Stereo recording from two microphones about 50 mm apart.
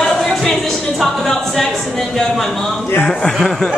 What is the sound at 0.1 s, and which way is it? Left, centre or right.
Speech, centre.